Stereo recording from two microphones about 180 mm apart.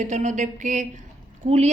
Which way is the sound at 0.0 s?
40° right (ahead or behind).